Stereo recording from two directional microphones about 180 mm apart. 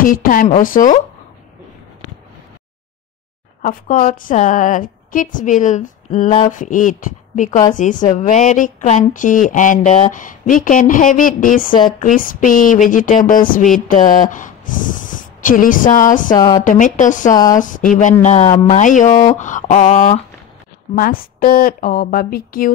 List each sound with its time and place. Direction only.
0.0 s a woman's voice: 50° left (ahead or behind)
3.6 s a woman's voice: 45° left (ahead or behind)
16.3 s speech: 20° left (ahead or behind)
16.6 s a woman's voice: 45° left (ahead or behind)
17.3 s speech: 20° left (ahead or behind)
17.6 s a woman's voice: 45° left (ahead or behind); by 18.8 s 30° left (ahead or behind)
18.8 s a woman's voice: 45° left (ahead or behind)